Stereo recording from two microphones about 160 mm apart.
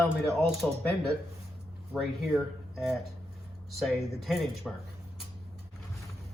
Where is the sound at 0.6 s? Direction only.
5° left (ahead or behind).